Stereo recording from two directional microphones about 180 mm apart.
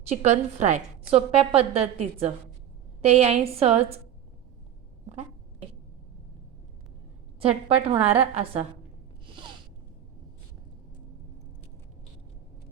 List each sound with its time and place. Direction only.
0.2 s a woman's voice: 40° right (ahead or behind)
7.3 s a woman's voice: 30° right (ahead or behind)
9.3 s a sound: 25° right (ahead or behind)